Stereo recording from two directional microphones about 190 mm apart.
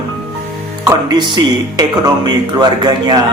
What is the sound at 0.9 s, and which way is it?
Speech, 20° right (ahead or behind).